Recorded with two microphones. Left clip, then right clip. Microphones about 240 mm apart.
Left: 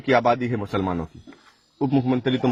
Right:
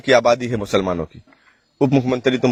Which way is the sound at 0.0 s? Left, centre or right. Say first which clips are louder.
Right 5 dB; right.